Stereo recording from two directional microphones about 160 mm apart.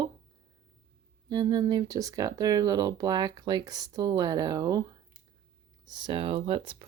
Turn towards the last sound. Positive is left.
turn(degrees=-35)  # may be behind; listen again after turning